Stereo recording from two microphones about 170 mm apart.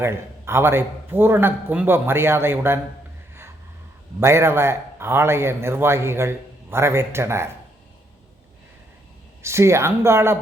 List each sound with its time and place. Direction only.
0.0 s a man's voice: 15° right (ahead or behind)
4.2 s a man's voice: 15° right (ahead or behind)
9.4 s a man's voice: 15° right (ahead or behind)